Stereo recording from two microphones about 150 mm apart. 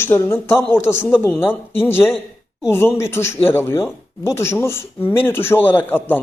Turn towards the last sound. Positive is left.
turn(degrees=15)  # may be behind; listen again after turning